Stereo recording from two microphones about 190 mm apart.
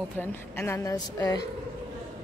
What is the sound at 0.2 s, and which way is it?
Speech, 10° left (ahead or behind).